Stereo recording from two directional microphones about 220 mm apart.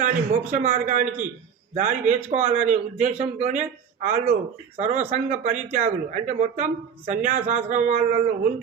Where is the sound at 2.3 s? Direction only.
35° right (ahead or behind).